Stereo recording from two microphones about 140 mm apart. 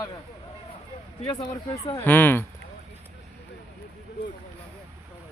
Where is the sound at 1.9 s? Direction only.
15° left (ahead or behind).